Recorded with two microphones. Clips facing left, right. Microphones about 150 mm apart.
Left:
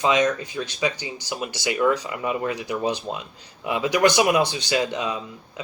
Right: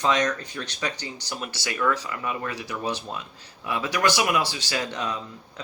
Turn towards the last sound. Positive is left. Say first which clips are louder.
# left 3 dB
turn(degrees=10)  # may be behind; listen again after turning